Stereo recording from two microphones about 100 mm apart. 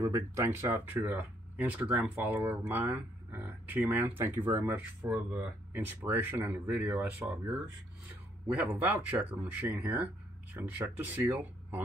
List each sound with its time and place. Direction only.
0.0 s speech: 30° right (ahead or behind)